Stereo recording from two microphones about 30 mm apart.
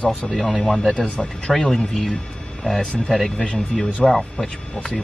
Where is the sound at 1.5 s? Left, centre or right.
Centre.